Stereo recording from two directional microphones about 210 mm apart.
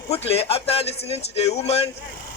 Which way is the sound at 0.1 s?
30° left (ahead or behind).